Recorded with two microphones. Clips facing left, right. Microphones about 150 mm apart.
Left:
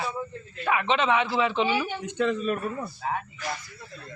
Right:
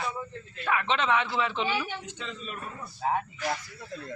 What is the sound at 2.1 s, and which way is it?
Speech, 60° left (ahead or behind).